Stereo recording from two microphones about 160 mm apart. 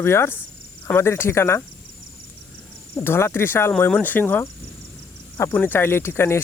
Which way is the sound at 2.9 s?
15° left (ahead or behind).